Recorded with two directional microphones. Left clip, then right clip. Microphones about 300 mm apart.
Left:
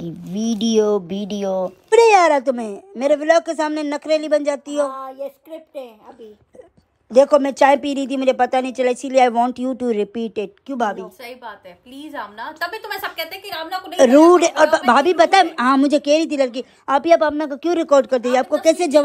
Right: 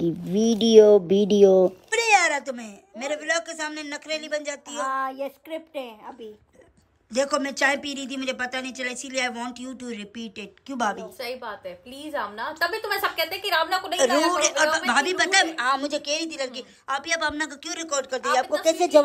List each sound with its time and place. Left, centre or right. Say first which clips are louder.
0.0 s speech: right 4 dB; centre
7.1 s speech: left 12 dB; centre
13.5 s a woman's voice: right 3 dB; right
13.9 s speech: left 11 dB; centre